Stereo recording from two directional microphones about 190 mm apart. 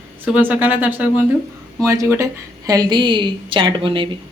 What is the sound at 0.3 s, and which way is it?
A woman's voice, 10° right (ahead or behind).